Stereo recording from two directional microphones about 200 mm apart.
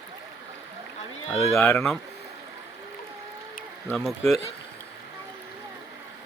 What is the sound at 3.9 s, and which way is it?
Speech, centre (ahead or behind).